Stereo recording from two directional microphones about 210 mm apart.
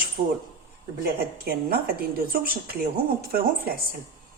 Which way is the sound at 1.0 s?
45° right (ahead or behind).